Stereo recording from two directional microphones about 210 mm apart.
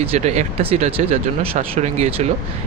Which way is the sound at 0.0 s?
30° right (ahead or behind).